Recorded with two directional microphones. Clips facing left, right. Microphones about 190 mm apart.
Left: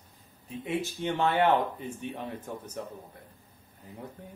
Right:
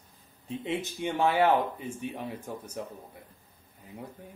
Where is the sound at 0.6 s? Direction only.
20° right (ahead or behind).